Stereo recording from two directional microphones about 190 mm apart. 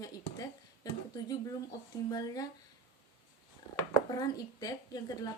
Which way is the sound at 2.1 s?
20° left (ahead or behind).